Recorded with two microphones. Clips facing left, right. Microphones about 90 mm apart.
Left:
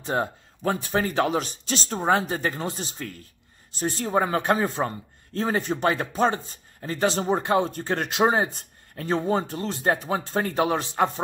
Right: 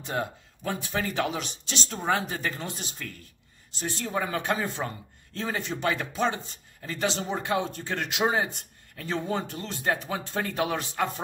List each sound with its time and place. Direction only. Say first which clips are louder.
0.0 s a man's voice: left 5 dB; 35° left (ahead or behind)